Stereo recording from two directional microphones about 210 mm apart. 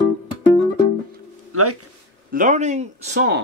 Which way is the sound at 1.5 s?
90° right.